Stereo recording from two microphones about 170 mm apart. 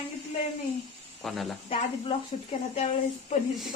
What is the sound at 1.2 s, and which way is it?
Speech, centre (ahead or behind).